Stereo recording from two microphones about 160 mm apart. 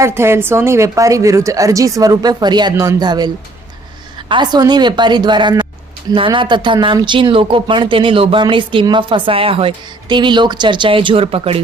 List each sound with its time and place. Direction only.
0.0 s speech: 15° right (ahead or behind)
4.3 s speech: 25° right (ahead or behind)